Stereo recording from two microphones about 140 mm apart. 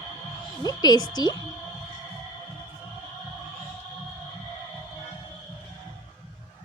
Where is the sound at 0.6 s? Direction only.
30° left (ahead or behind).